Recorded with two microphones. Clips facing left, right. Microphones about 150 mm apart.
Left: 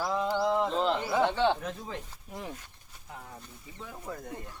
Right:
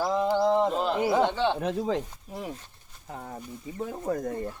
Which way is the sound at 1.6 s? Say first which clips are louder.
Right 10 dB; 90° right.